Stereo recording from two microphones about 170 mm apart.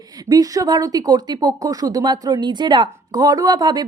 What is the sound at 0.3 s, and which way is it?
Speech, 20° right (ahead or behind).